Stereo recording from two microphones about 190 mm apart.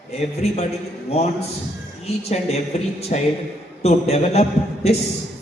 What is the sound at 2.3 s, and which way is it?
A woman's voice, 35° left (ahead or behind).